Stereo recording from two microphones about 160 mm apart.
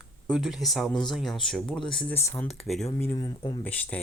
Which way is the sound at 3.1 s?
30° left (ahead or behind).